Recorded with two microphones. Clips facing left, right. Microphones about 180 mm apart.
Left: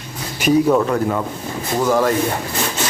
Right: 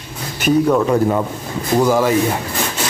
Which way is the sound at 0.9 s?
20° right (ahead or behind).